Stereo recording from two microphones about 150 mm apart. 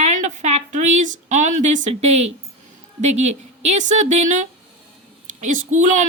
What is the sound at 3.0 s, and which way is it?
Speech, 50° right (ahead or behind).